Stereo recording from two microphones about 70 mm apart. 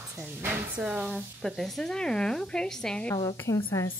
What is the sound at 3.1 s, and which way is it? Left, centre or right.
Speech, left.